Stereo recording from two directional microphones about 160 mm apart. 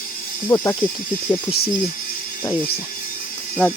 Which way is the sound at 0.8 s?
60° left (ahead or behind).